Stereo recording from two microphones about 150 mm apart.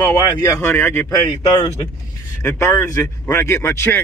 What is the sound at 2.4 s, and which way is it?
Speech, 20° left (ahead or behind).